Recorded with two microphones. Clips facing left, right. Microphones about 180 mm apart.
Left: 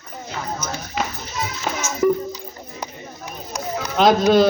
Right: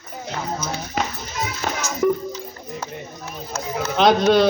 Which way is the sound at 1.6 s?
50° right (ahead or behind).